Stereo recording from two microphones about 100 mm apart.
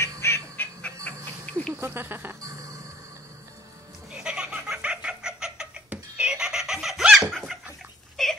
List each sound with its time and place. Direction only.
0.2 s bird: 25° left (ahead or behind)
1.0 s music: 15° left (ahead or behind)
1.7 s insect: 20° right (ahead or behind)
4.1 s chicken: 10° right (ahead or behind)
7.2 s a sound: centre (ahead or behind)
8.2 s wail: 5° left (ahead or behind)